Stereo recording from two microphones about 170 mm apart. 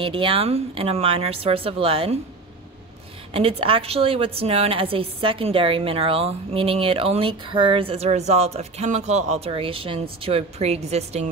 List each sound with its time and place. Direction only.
0.0 s a woman's voice: 30° right (ahead or behind)
3.3 s a woman's voice: 35° right (ahead or behind)